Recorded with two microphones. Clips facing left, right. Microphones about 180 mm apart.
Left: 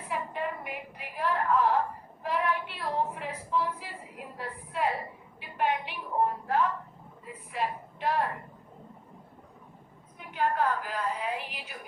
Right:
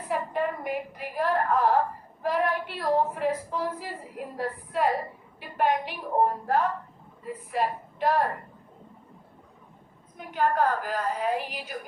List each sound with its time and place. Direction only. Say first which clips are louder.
0.1 s a woman's voice: right 5 dB; 45° right (ahead or behind)
10.2 s a woman's voice: right 4 dB; 40° right (ahead or behind)